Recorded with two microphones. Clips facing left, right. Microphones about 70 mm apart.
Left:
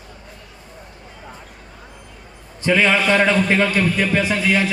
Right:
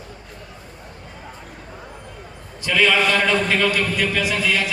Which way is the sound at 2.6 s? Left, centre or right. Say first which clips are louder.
Left 2 dB; left.